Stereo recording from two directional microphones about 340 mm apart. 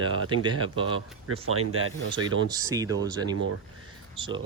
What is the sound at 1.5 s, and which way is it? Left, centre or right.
Speech, right.